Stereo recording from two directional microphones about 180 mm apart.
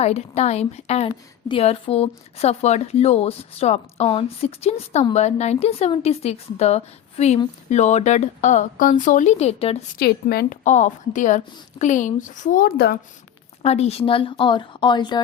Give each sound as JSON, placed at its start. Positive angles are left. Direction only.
{"t": 0.0, "sound": "a woman's voice", "side_deg": 35}
{"t": 9.9, "sound": "a woman's voice", "side_deg": 55}
{"t": 13.6, "sound": "speech", "side_deg": 35}